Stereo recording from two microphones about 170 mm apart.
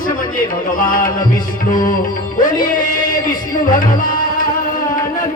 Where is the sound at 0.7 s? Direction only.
55° left (ahead or behind).